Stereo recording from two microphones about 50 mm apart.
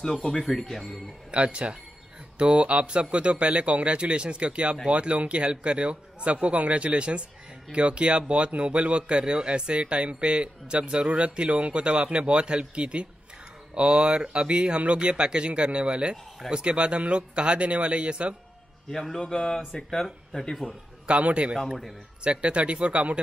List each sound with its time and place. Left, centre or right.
0.0 s speech: centre
1.3 s a man's voice: right
18.9 s speech: centre
21.1 s a man's voice: right